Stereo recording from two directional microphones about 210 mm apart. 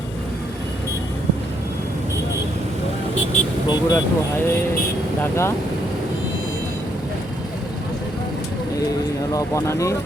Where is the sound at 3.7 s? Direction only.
15° left (ahead or behind).